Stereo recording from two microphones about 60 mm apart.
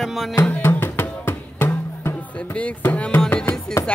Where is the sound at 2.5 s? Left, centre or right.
Left.